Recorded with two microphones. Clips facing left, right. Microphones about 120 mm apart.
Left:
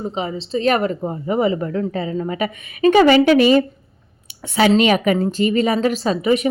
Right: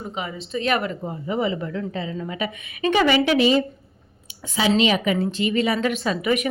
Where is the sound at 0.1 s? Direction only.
30° left (ahead or behind).